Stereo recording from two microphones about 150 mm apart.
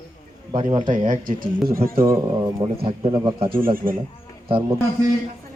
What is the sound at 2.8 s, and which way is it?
Speech, 35° right (ahead or behind).